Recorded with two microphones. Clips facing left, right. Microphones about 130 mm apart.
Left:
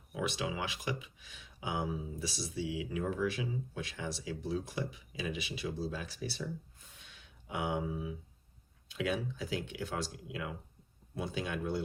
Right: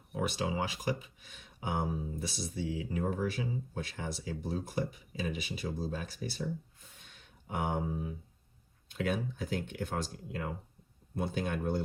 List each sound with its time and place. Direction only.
0.2 s speech: 40° right (ahead or behind)
7.0 s a sound: 45° right (ahead or behind)
8.9 s speech: 50° right (ahead or behind)